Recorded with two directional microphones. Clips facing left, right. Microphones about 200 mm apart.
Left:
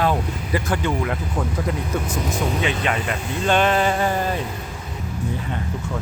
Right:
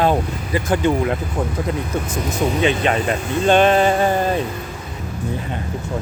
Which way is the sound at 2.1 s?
25° right (ahead or behind).